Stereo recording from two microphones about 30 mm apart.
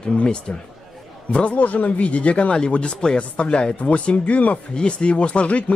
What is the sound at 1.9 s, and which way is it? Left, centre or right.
Speech, left.